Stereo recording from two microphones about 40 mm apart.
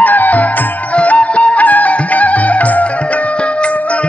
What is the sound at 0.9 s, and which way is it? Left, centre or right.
Music, left.